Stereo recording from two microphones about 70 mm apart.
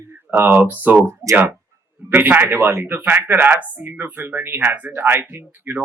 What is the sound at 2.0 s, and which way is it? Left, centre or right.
A man's voice, right.